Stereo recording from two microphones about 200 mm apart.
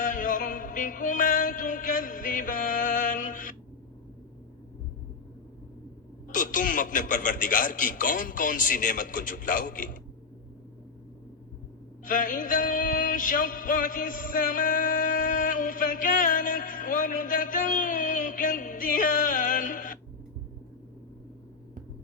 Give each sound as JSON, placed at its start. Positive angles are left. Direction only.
{"t": 0.0, "sound": "music", "side_deg": 40}
{"t": 6.2, "sound": "speech", "side_deg": 40}
{"t": 12.0, "sound": "music", "side_deg": 40}